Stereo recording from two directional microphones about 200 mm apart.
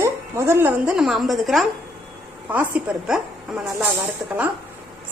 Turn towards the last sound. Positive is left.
turn(degrees=-10)  # may be behind; listen again after turning